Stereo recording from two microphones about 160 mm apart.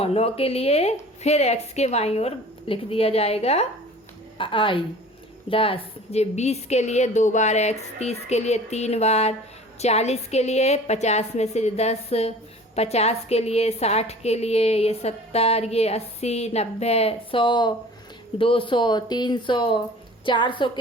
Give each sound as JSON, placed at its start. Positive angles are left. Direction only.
{"t": 0.0, "sound": "a woman's voice", "side_deg": 40}